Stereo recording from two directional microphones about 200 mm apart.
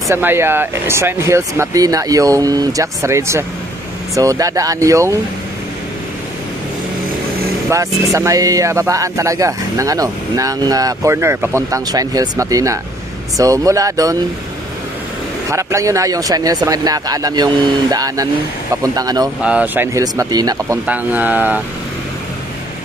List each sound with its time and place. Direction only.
0.1 s speech: 10° right (ahead or behind)
7.7 s speech: 15° right (ahead or behind)
15.5 s speech: 15° right (ahead or behind)
19.4 s speech: 5° right (ahead or behind)